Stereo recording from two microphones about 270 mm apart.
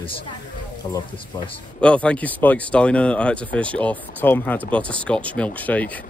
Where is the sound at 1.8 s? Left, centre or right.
Centre.